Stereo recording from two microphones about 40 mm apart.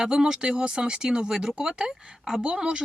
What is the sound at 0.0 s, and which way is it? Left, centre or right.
Speech, centre.